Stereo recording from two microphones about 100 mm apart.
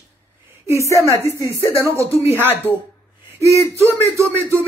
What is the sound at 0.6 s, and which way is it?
A woman's voice, 30° right (ahead or behind).